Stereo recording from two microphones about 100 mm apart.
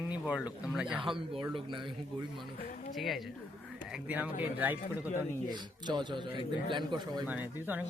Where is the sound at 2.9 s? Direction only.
Centre (ahead or behind).